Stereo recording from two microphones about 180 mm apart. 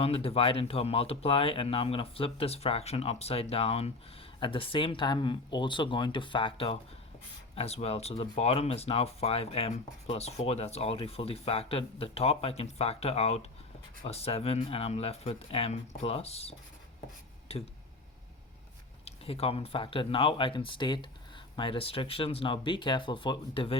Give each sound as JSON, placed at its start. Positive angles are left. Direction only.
{"t": 0.0, "sound": "speech", "side_deg": 30}
{"t": 19.0, "sound": "speech", "side_deg": 30}